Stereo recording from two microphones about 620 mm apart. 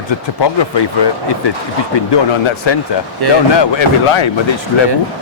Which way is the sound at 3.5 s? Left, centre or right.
Left.